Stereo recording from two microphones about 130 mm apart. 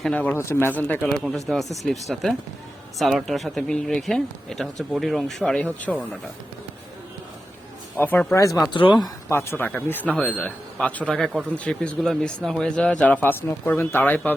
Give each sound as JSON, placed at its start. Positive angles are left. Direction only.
{"t": 0.0, "sound": "a man's voice", "side_deg": 10}
{"t": 1.5, "sound": "a man's voice", "side_deg": 0}
{"t": 7.9, "sound": "a man's voice", "side_deg": 15}
{"t": 8.5, "sound": "speech", "side_deg": 30}
{"t": 9.3, "sound": "a man's voice", "side_deg": 20}